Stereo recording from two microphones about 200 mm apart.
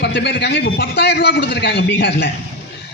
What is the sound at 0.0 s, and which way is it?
A man's voice, 55° left (ahead or behind).